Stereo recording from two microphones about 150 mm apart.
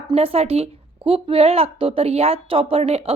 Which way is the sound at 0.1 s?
40° right (ahead or behind).